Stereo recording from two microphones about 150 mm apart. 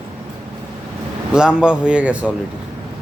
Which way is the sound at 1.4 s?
5° right (ahead or behind).